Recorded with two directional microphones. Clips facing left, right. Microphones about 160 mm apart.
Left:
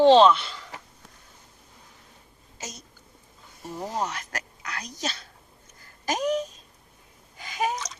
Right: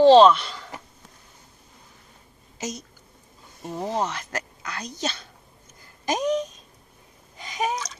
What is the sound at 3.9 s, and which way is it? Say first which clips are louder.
Speech: right 3 dB; 25° right (ahead or behind).